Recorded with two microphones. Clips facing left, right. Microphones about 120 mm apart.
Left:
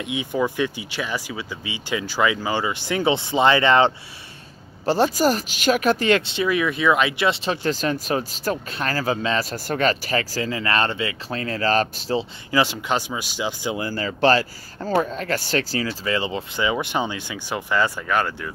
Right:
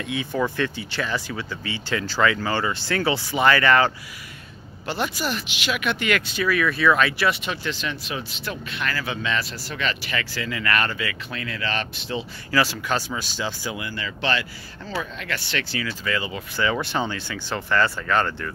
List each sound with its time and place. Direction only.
0.0 s speech: 15° left (ahead or behind)
4.8 s speech: 35° left (ahead or behind)
12.4 s speech: 20° left (ahead or behind)
13.7 s speech: 40° left (ahead or behind)
16.6 s speech: 15° left (ahead or behind)